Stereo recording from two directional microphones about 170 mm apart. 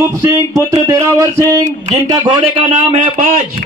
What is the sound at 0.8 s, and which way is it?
Speech, 20° right (ahead or behind).